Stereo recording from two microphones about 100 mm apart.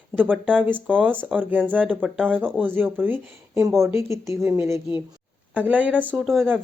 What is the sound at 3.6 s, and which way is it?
Speech, 30° right (ahead or behind).